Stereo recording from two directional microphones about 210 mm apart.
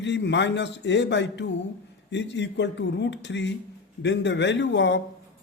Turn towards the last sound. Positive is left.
turn(degrees=55)  # may be behind; listen again after turning